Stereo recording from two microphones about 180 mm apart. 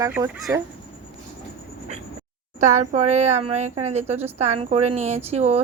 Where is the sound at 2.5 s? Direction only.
40° right (ahead or behind).